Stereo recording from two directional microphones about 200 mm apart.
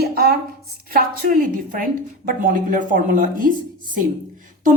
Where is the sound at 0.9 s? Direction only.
50° right (ahead or behind).